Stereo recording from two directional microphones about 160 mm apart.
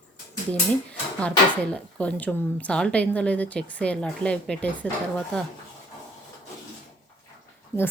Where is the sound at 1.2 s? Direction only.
5° left (ahead or behind).